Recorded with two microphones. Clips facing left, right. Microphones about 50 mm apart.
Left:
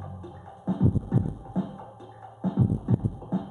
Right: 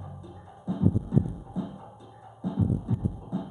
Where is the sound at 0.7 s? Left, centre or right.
Left.